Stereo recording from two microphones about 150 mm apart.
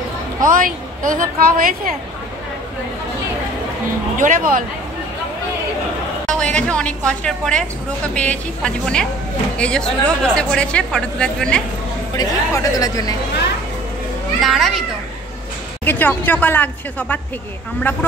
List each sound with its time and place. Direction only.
0.4 s a woman's voice: 65° right (ahead or behind)
4.2 s speech: 65° right (ahead or behind)
6.2 s a sound: 5° left (ahead or behind)
7.1 s a woman's voice: 5° left (ahead or behind)
12.2 s speech: 25° left (ahead or behind)
14.4 s a woman's voice: centre (ahead or behind)
15.8 s speech: 10° left (ahead or behind)